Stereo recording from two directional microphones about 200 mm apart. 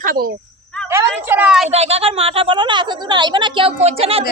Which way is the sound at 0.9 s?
10° right (ahead or behind).